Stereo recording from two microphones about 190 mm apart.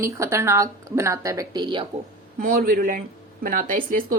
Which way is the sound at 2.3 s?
45° right (ahead or behind).